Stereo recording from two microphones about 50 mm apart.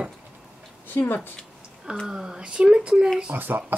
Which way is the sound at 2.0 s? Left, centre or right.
Centre.